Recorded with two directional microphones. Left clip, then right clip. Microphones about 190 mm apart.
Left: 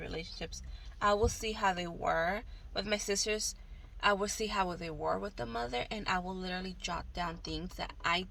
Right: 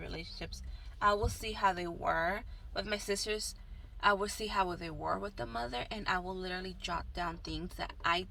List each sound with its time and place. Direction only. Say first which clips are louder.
0.0 s a sound: left 3 dB; 25° left (ahead or behind)
1.1 s speech: left 3 dB; 25° left (ahead or behind)
3.2 s a woman's voice: left 3 dB; 50° left (ahead or behind)
4.0 s speech: even; 20° left (ahead or behind)